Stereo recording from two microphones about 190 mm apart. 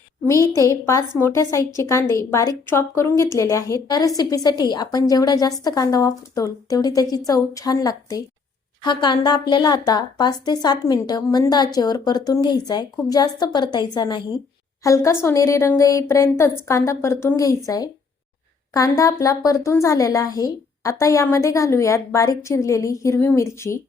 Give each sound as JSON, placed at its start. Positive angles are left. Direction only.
{"t": 0.3, "sound": "a woman's voice", "side_deg": 15}
{"t": 18.7, "sound": "a woman's voice", "side_deg": 15}